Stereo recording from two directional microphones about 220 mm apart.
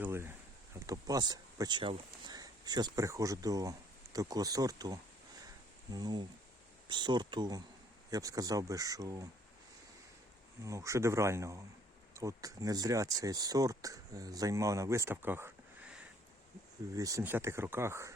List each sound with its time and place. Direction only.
0.0 s a sound: 10° right (ahead or behind)
0.8 s speech: 15° right (ahead or behind)
10.6 s speech: 15° right (ahead or behind)